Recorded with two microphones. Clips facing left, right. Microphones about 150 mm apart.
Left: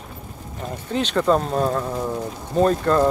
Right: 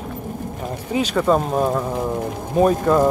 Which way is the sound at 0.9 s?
10° right (ahead or behind).